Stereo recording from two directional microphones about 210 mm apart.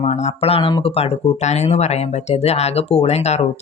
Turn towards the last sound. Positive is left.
turn(degrees=30)  # may be behind; listen again after turning